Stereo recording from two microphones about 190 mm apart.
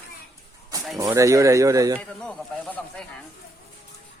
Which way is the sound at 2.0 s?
5° left (ahead or behind).